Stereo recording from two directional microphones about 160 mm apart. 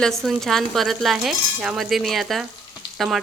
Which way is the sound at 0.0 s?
Centre (ahead or behind).